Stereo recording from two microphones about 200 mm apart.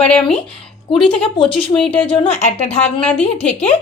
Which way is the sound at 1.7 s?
5° left (ahead or behind).